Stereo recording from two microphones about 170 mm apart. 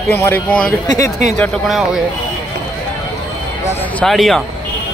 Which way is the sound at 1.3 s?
Centre (ahead or behind).